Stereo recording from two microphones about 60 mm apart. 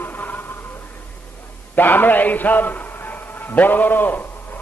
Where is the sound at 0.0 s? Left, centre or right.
Left.